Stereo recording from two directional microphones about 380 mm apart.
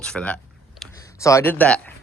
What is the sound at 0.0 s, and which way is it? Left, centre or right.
Speech, centre.